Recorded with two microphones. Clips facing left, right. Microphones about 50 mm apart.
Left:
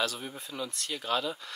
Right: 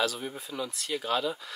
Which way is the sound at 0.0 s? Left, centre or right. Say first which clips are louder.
Right 3 dB; centre.